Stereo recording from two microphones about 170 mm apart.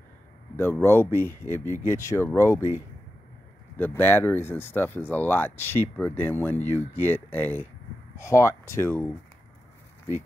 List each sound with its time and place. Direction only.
0.6 s speech: 15° left (ahead or behind)